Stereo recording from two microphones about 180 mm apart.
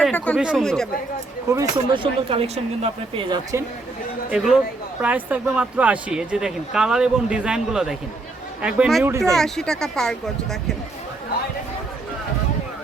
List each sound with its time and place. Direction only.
0.0 s speech: 5° left (ahead or behind)
1.7 s speech: 25° right (ahead or behind)
4.3 s speech: centre (ahead or behind)
9.0 s speech: 15° right (ahead or behind)
9.3 s speech: centre (ahead or behind)